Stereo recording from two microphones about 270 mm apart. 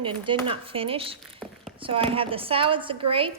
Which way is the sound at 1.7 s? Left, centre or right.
Centre.